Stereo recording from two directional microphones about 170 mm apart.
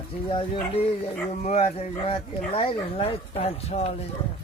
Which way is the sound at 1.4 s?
40° left (ahead or behind).